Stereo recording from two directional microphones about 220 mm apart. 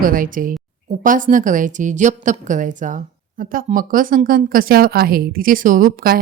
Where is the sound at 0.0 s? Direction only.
40° right (ahead or behind).